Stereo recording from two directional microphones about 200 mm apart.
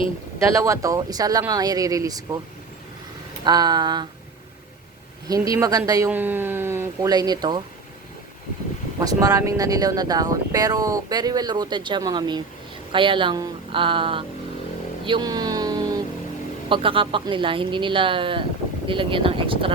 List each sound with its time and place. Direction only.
0.5 s speech: 15° right (ahead or behind)
3.4 s speech: 20° right (ahead or behind)
5.3 s speech: 15° right (ahead or behind)
9.0 s speech: 15° right (ahead or behind)
15.0 s vehicle: 20° right (ahead or behind)
16.6 s speech: 25° right (ahead or behind)